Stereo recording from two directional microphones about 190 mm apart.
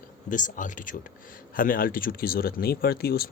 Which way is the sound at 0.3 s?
45° left (ahead or behind).